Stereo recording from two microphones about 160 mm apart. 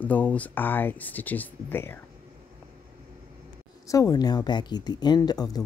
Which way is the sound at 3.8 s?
20° left (ahead or behind).